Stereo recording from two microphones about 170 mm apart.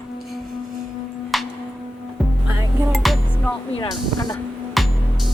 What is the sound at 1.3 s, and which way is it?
Music, centre (ahead or behind).